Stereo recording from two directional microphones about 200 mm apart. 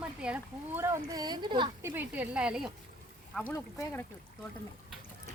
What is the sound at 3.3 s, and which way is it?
Speech, 10° left (ahead or behind).